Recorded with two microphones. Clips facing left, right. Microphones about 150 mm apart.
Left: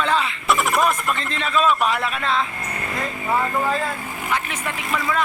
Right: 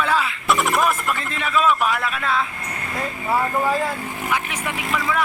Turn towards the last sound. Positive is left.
turn(degrees=-10)  # may be behind; listen again after turning